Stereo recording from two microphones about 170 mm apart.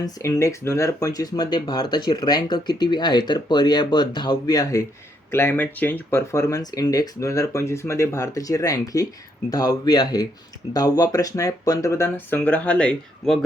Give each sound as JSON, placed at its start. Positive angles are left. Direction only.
{"t": 0.0, "sound": "speech", "side_deg": 20}